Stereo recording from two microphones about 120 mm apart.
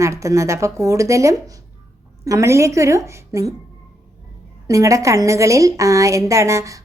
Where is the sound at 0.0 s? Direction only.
25° right (ahead or behind).